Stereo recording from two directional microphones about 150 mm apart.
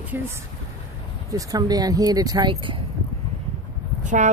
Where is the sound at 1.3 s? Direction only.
25° right (ahead or behind).